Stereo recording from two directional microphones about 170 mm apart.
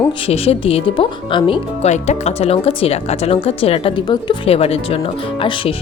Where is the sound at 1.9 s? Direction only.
40° left (ahead or behind).